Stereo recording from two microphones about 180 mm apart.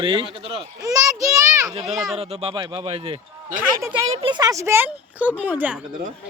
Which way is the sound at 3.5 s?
10° right (ahead or behind).